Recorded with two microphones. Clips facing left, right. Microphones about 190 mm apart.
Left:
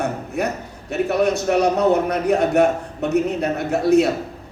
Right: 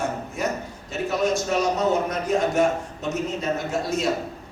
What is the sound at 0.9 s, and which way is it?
A woman's voice, 65° left (ahead or behind).